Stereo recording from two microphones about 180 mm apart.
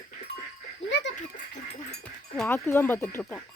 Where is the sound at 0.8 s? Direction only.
90° left.